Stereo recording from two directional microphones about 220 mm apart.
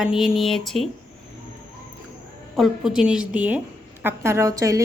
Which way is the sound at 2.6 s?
Centre (ahead or behind).